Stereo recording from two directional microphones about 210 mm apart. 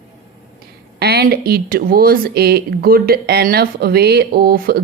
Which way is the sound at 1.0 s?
50° right (ahead or behind).